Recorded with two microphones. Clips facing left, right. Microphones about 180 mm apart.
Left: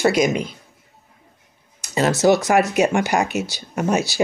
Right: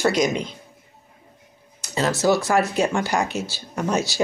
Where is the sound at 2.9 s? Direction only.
15° left (ahead or behind).